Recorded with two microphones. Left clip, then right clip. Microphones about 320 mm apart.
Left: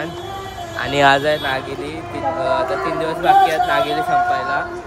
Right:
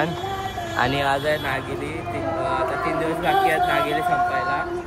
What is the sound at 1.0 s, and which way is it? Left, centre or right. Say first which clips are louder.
Speech: left 7 dB; left.